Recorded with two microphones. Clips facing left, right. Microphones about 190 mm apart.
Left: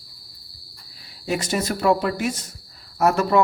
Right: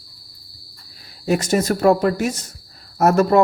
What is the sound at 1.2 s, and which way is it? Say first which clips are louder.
Speech: right 6 dB; 45° right (ahead or behind).